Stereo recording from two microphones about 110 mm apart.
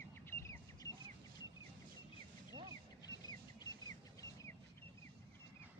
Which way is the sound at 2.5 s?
50° right (ahead or behind).